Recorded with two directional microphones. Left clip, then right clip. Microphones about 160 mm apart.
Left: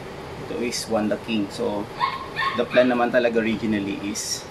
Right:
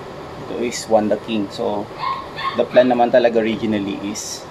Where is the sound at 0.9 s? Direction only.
5° right (ahead or behind).